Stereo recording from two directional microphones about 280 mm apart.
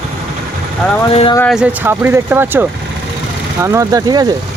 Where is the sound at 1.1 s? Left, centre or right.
Left.